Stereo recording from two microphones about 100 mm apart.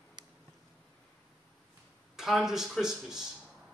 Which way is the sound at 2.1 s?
5° right (ahead or behind).